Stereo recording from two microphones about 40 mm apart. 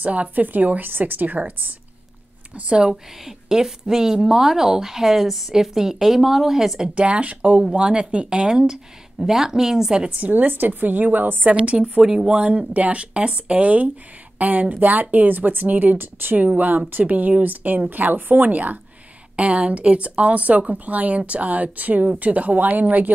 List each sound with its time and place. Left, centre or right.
0.0 s speech: right
2.7 s a woman's voice: right
7.0 s speech: right
7.7 s speech: right
9.2 s a woman's voice: centre
10.2 s speech: right
11.5 s speech: right
12.0 s a woman's voice: centre
12.3 s speech: right
16.3 s speech: right
19.3 s speech: right